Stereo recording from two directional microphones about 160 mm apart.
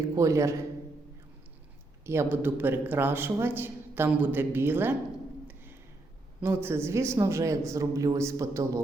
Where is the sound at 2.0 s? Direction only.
15° right (ahead or behind).